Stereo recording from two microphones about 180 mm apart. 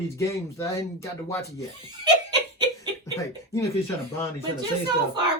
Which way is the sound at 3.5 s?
15° left (ahead or behind).